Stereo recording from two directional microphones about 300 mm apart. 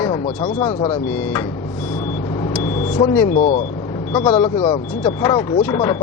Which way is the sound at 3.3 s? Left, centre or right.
Left.